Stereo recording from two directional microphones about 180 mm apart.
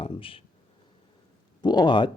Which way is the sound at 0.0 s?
30° left (ahead or behind).